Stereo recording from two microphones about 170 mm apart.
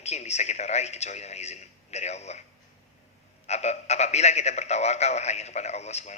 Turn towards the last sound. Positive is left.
turn(degrees=40)  # may be behind; listen again after turning